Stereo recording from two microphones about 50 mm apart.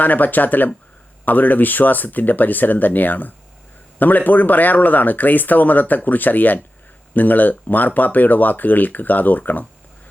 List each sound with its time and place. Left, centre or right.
0.0 s speech: left